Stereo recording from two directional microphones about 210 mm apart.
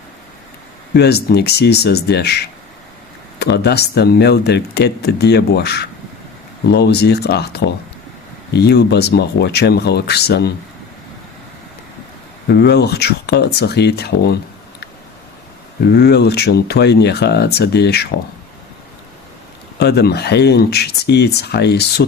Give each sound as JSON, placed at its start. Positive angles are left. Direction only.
{"t": 0.9, "sound": "speech", "side_deg": 50}
{"t": 12.5, "sound": "speech", "side_deg": 50}
{"t": 15.9, "sound": "speech", "side_deg": 50}
{"t": 19.8, "sound": "speech", "side_deg": 50}